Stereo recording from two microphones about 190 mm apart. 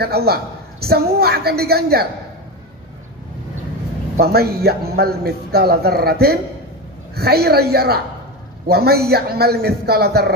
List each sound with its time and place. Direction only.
0.0 s a man's voice: 55° right (ahead or behind)
4.2 s a man's voice: 55° right (ahead or behind)